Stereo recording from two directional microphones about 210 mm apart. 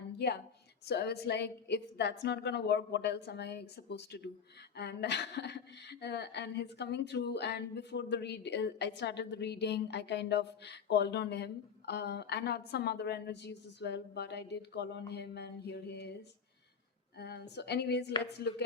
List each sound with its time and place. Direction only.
0.2 s a woman's voice: 55° left (ahead or behind)
17.2 s a woman's voice: 50° left (ahead or behind)